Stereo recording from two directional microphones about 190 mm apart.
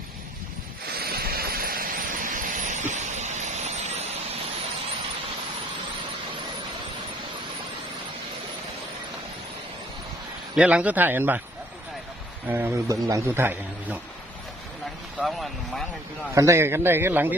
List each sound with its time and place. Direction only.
0.9 s vehicle: 55° right (ahead or behind); by 4.0 s 35° right (ahead or behind)
10.5 s a man's voice: 5° right (ahead or behind)
12.5 s a man's voice: 10° right (ahead or behind)
15.2 s speech: centre (ahead or behind)
16.3 s a man's voice: 15° right (ahead or behind)